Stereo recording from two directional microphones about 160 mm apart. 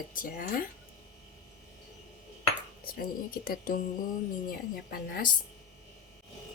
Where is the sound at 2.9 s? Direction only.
65° left (ahead or behind).